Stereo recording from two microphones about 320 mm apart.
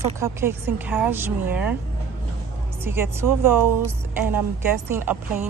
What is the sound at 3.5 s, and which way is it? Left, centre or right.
Speech, right.